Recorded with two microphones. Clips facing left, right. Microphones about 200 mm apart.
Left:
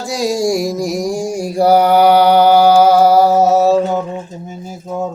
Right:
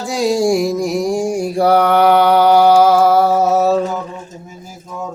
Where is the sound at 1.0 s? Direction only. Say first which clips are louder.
Right 2 dB; centre (ahead or behind).